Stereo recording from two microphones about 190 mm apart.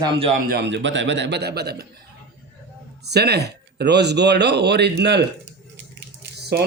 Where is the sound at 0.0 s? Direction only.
30° right (ahead or behind).